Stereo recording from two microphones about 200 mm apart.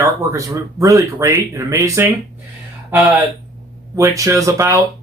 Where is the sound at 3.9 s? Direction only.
15° right (ahead or behind).